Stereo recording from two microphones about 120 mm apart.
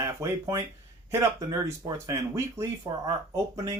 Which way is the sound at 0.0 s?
25° right (ahead or behind).